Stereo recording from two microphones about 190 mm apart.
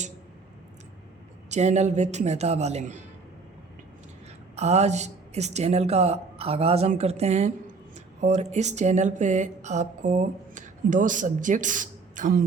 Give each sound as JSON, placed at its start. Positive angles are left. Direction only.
{"t": 1.5, "sound": "speech", "side_deg": -35}
{"t": 4.5, "sound": "speech", "side_deg": -35}